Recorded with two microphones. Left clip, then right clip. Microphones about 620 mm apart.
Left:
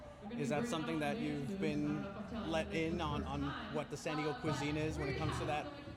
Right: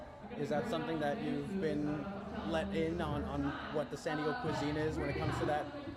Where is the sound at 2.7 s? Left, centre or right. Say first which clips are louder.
Right 2 dB; left.